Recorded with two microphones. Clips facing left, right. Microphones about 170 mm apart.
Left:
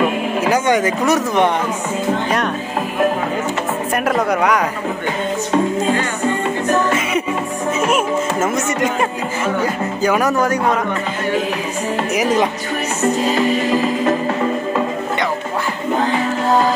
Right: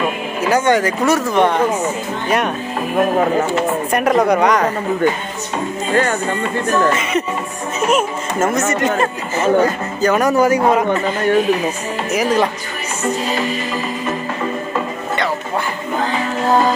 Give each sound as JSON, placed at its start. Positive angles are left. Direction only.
{"t": 0.5, "sound": "speech", "side_deg": 15}
{"t": 3.9, "sound": "speech", "side_deg": 5}
{"t": 7.9, "sound": "speech", "side_deg": 10}
{"t": 10.0, "sound": "speech", "side_deg": 5}
{"t": 12.1, "sound": "speech", "side_deg": 15}